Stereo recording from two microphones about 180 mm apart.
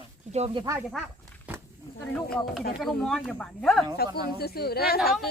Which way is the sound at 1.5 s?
10° right (ahead or behind).